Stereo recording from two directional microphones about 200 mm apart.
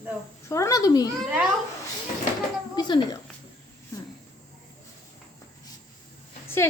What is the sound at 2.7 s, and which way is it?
Speech, 20° left (ahead or behind).